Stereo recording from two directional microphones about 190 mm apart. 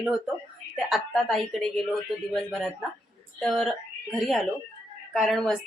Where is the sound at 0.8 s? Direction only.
Centre (ahead or behind).